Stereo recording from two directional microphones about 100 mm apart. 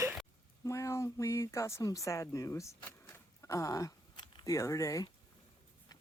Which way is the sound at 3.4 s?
35° left (ahead or behind).